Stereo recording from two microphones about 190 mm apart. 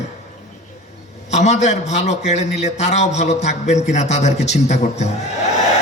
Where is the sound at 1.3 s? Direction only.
35° left (ahead or behind).